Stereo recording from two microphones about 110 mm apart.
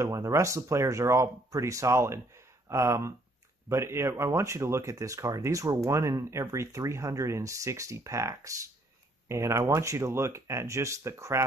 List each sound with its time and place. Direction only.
0.0 s speech: 25° right (ahead or behind)